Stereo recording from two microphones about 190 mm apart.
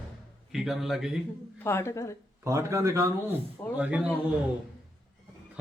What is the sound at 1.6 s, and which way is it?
Speech, 15° left (ahead or behind).